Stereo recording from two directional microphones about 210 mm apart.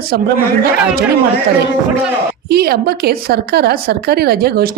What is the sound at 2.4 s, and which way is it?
A woman's voice, 50° right (ahead or behind).